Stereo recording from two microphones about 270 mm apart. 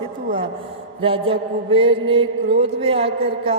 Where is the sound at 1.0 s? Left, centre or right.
Centre.